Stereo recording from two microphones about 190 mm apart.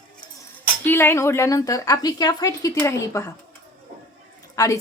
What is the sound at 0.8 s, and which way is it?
A woman's voice, 10° left (ahead or behind).